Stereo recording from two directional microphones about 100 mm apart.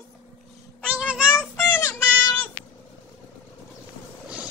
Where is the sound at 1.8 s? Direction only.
25° left (ahead or behind).